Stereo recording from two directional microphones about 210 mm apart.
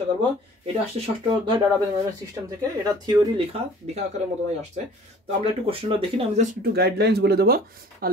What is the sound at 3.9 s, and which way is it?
Speech, 35° right (ahead or behind).